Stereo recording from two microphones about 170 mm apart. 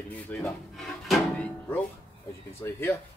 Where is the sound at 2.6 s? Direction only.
15° left (ahead or behind).